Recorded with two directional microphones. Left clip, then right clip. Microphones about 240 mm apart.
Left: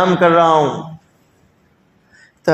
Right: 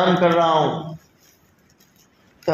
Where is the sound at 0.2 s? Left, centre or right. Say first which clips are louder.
Left 5 dB; left.